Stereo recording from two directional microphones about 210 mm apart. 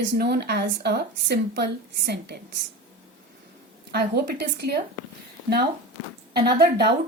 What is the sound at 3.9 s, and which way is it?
Speech, 50° right (ahead or behind).